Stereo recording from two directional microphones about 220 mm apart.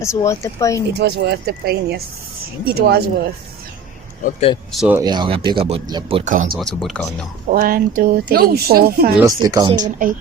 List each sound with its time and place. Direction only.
0.0 s speech: 15° left (ahead or behind)
0.9 s speech: 45° right (ahead or behind)
4.2 s speech: 30° left (ahead or behind)
4.7 s speech: centre (ahead or behind)
4.9 s speech: 20° right (ahead or behind)
6.6 s speech: centre (ahead or behind)
7.5 s speech: 40° right (ahead or behind)
9.2 s speech: 15° right (ahead or behind)